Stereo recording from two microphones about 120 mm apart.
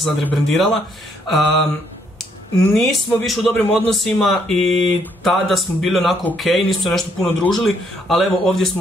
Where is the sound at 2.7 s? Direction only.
Centre (ahead or behind).